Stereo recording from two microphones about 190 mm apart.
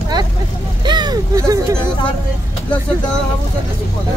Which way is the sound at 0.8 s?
25° right (ahead or behind).